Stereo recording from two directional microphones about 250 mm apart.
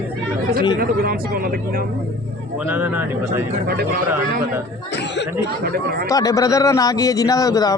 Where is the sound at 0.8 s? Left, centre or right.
Right.